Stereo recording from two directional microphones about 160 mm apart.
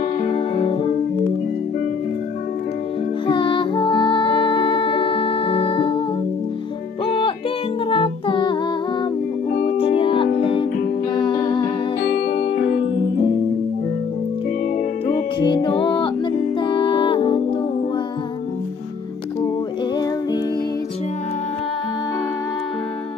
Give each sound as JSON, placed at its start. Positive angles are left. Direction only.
{"t": 0.3, "sound": "music", "side_deg": 35}
{"t": 3.3, "sound": "music", "side_deg": 30}
{"t": 7.1, "sound": "music", "side_deg": 35}
{"t": 12.5, "sound": "music", "side_deg": 90}
{"t": 12.8, "sound": "music", "side_deg": 35}
{"t": 15.3, "sound": "music", "side_deg": 30}